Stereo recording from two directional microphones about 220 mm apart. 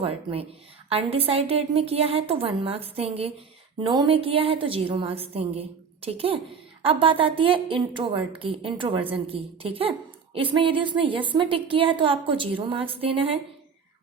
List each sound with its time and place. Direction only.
0.0 s a woman's voice: 25° right (ahead or behind)